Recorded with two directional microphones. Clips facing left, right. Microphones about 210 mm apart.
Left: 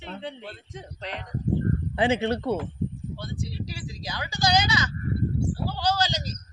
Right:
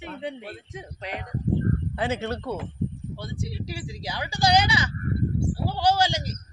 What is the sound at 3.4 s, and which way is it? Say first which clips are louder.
Speech: right 1 dB; 25° right (ahead or behind).